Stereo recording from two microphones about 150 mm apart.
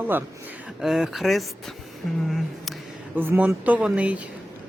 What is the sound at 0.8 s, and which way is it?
Speech, centre (ahead or behind).